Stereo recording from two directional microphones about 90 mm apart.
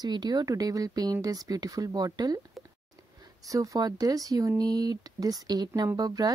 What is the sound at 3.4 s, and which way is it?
Speech, 40° right (ahead or behind).